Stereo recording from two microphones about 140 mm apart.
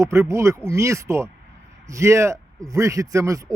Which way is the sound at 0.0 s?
20° right (ahead or behind).